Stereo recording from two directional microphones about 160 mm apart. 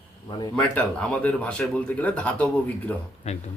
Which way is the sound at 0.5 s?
5° left (ahead or behind).